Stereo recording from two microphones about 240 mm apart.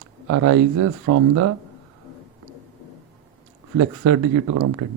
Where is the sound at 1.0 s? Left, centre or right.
Right.